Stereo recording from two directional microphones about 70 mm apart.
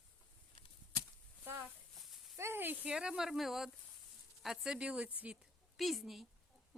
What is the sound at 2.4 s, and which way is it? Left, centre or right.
Snake, right.